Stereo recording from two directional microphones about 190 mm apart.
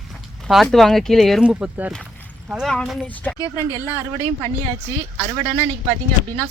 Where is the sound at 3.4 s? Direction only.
15° left (ahead or behind).